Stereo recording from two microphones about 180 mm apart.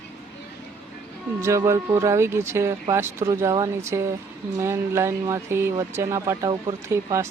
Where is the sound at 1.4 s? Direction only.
15° right (ahead or behind).